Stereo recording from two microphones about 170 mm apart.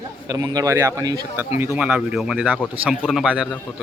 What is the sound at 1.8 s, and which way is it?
A man's voice, 5° right (ahead or behind).